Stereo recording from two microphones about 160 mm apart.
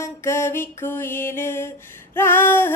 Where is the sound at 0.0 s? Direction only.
15° left (ahead or behind).